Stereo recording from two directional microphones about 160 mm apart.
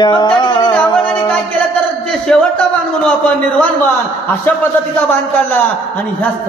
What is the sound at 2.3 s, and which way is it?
A man's voice, 5° left (ahead or behind).